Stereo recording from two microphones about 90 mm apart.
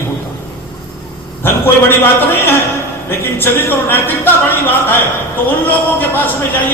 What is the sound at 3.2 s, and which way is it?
A man's voice, 25° left (ahead or behind).